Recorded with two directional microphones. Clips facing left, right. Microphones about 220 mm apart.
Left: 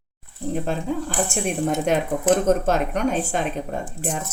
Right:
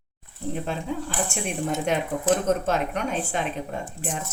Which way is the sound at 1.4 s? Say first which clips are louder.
Left 4 dB; 45° left (ahead or behind).